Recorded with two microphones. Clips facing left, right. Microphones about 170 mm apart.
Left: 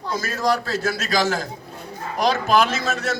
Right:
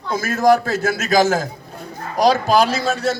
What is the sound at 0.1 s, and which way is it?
A man's voice, 50° right (ahead or behind).